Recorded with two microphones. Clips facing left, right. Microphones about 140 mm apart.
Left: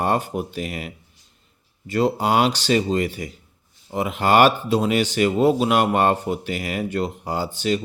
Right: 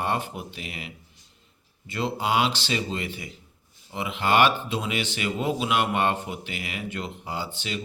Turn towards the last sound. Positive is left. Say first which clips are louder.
# left 9 dB
turn(degrees=40)  # may be behind; listen again after turning